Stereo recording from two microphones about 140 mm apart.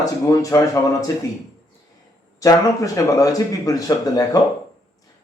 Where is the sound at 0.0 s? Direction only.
25° left (ahead or behind).